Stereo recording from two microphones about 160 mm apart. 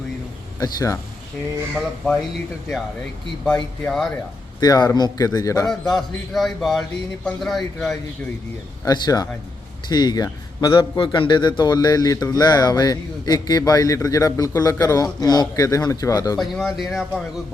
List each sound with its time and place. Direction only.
0.6 s a man's voice: 25° left (ahead or behind)
1.7 s a man's voice: centre (ahead or behind)
3.4 s a man's voice: 5° left (ahead or behind)
4.6 s a man's voice: 25° left (ahead or behind)
5.6 s a man's voice: centre (ahead or behind)
8.8 s a man's voice: 25° left (ahead or behind)
16.4 s a man's voice: centre (ahead or behind)